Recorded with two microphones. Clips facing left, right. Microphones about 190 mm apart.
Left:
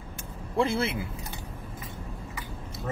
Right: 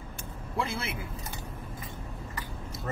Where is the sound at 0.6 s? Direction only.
30° left (ahead or behind).